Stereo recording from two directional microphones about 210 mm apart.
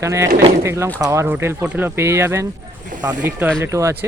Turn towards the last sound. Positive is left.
turn(degrees=-15)  # may be behind; listen again after turning